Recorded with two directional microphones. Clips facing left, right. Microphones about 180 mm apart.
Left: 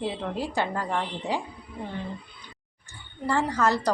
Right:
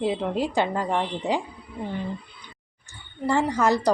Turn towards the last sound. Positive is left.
turn(degrees=-15)  # may be behind; listen again after turning